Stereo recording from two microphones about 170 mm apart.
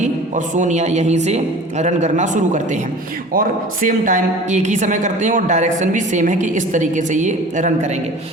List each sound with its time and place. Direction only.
0.0 s a woman's voice: 45° right (ahead or behind)